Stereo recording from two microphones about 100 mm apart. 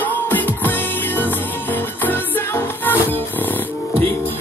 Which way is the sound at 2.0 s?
20° left (ahead or behind).